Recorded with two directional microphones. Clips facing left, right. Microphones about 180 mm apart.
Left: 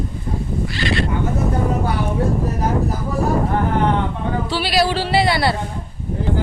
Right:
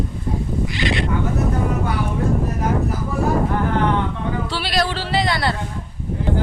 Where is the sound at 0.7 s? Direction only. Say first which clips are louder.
Left 2 dB; 20° right (ahead or behind).